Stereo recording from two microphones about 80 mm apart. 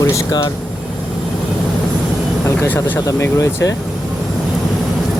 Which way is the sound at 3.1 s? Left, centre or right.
Left.